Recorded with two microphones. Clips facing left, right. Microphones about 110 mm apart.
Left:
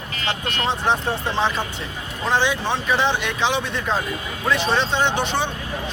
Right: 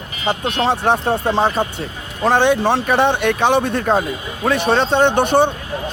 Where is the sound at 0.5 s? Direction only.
65° right (ahead or behind).